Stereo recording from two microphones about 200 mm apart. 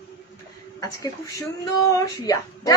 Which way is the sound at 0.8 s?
15° left (ahead or behind).